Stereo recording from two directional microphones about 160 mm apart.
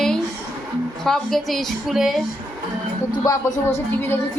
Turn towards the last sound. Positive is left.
turn(degrees=15)  # may be behind; listen again after turning